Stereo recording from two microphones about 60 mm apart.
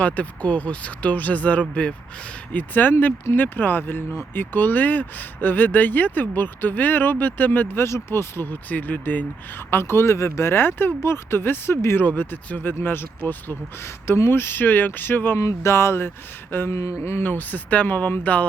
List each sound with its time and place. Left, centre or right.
0.0 s speech: left
7.8 s speech: left
15.4 s speech: left
17.0 s speech: left
17.2 s speech: left